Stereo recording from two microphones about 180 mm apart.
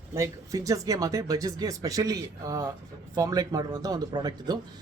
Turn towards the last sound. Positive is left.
turn(degrees=-20)  # may be behind; listen again after turning